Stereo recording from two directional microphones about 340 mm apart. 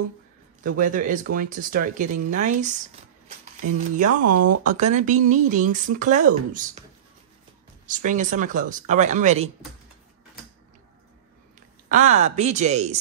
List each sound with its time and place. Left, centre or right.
0.7 s speech: right
4.4 s speech: right
4.7 s speech: right
7.9 s speech: right
11.9 s speech: right